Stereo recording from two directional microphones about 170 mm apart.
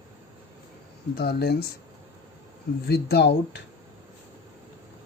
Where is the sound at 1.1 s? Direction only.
65° left (ahead or behind).